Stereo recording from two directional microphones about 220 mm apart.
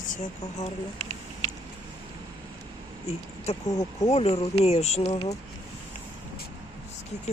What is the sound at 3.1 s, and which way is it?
Speech, 30° left (ahead or behind).